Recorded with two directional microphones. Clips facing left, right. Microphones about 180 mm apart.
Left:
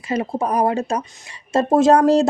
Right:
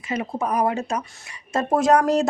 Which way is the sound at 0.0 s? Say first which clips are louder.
Left 4 dB; 35° left (ahead or behind).